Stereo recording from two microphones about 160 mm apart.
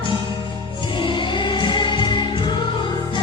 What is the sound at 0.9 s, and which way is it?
Music, 30° left (ahead or behind).